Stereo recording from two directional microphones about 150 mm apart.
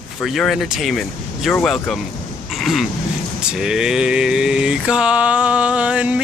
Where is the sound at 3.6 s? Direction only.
5° right (ahead or behind).